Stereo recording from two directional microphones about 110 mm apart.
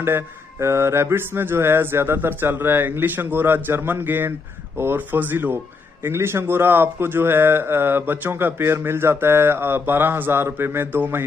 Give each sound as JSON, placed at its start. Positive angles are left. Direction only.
{"t": 0.0, "sound": "speech", "side_deg": -25}